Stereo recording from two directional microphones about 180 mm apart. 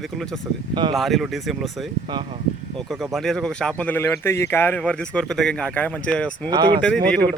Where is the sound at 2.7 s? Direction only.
Centre (ahead or behind).